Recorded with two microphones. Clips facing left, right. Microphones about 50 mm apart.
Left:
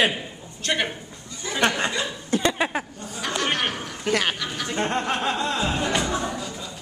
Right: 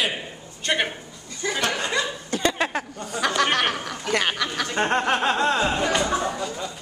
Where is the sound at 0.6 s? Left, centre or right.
Centre.